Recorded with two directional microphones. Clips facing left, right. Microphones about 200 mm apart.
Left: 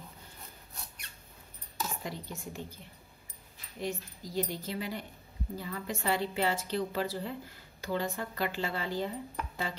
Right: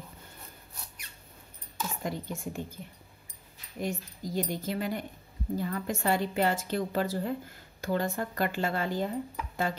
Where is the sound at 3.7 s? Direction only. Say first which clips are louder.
Right 3 dB; 50° right (ahead or behind).